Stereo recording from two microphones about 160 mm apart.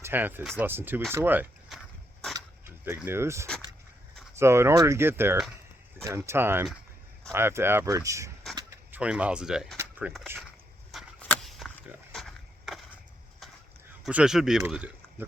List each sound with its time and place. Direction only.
0.0 s speech: 10° right (ahead or behind)
1.7 s a sound: centre (ahead or behind)
2.3 s dog: 15° right (ahead or behind)
3.1 s speech: 15° right (ahead or behind)
8.9 s speech: 5° right (ahead or behind)
9.7 s a sound: 10° right (ahead or behind)
11.2 s a sound: 5° left (ahead or behind)
12.1 s skateboard: centre (ahead or behind)
14.0 s speech: 5° right (ahead or behind)